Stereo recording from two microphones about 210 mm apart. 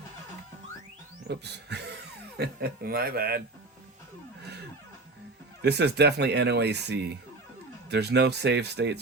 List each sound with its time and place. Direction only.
1.3 s speech: 55° right (ahead or behind)
5.6 s speech: 50° right (ahead or behind)